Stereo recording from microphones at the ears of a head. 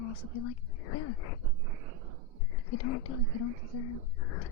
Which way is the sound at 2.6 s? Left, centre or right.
Left.